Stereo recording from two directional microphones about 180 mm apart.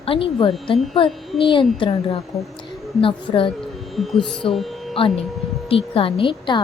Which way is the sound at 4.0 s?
Centre (ahead or behind).